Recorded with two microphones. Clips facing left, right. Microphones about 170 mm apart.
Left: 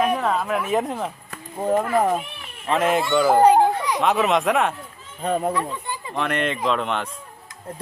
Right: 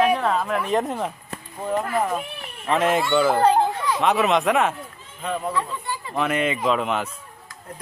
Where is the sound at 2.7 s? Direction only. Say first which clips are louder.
Even; centre (ahead or behind).